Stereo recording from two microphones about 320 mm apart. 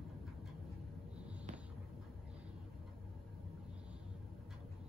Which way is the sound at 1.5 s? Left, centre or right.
Right.